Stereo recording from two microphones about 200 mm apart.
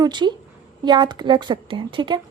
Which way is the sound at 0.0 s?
20° right (ahead or behind).